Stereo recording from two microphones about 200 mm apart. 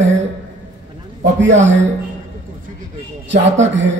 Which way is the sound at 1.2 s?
65° right (ahead or behind).